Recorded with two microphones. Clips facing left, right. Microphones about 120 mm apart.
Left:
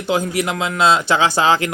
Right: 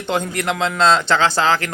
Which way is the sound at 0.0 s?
5° left (ahead or behind).